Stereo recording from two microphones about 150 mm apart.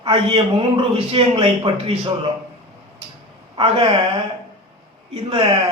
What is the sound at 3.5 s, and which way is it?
Speech, 40° right (ahead or behind).